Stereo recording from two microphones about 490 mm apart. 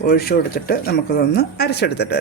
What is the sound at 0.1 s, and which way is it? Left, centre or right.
Speech, centre.